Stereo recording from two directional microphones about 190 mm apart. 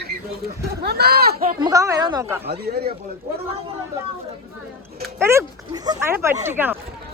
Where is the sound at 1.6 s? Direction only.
15° right (ahead or behind).